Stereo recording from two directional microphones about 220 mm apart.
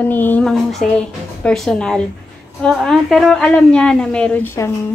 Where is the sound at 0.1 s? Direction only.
10° left (ahead or behind).